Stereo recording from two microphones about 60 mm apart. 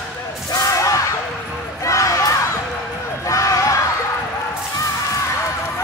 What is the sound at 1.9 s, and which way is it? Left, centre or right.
Music, left.